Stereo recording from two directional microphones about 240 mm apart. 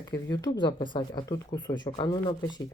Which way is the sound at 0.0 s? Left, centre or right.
Centre.